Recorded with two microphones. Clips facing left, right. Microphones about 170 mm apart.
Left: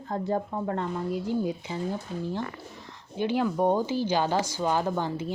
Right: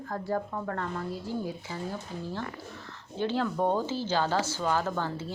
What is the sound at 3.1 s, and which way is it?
Speech, 15° left (ahead or behind).